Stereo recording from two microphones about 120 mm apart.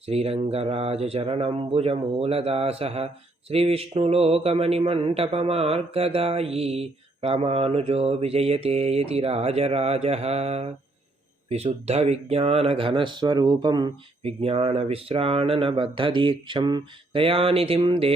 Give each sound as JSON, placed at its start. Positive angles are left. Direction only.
{"t": 0.0, "sound": "speech", "side_deg": -55}
{"t": 14.2, "sound": "speech", "side_deg": -55}